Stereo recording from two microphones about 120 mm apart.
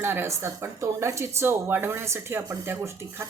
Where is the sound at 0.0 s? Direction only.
20° right (ahead or behind).